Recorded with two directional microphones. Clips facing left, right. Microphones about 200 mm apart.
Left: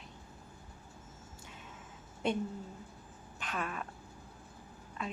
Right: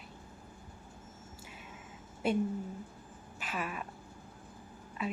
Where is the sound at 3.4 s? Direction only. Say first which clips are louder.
Even; 5° right (ahead or behind).